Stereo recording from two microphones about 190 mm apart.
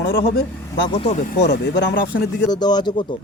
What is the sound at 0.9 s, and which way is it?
Speech, 35° left (ahead or behind).